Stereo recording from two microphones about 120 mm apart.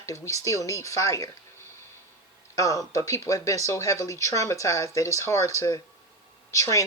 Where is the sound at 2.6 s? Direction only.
25° left (ahead or behind).